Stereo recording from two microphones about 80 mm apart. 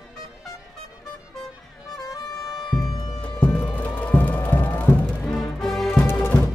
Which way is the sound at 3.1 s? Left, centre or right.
Centre.